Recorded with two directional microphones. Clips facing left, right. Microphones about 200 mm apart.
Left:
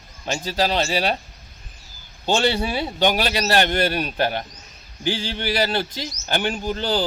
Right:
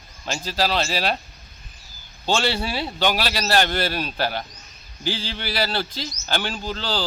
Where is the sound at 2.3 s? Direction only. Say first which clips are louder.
Left 3 dB; 20° left (ahead or behind).